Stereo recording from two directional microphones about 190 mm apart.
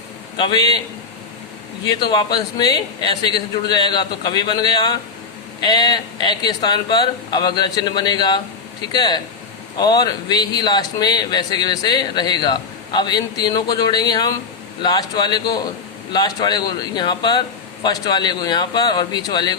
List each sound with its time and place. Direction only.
0.3 s speech: 25° left (ahead or behind)
1.8 s speech: 20° left (ahead or behind)